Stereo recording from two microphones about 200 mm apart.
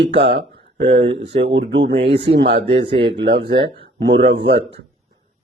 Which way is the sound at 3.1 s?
50° right (ahead or behind).